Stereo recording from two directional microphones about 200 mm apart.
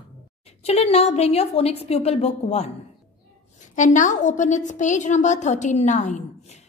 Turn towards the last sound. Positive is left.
turn(degrees=35)  # may be behind; listen again after turning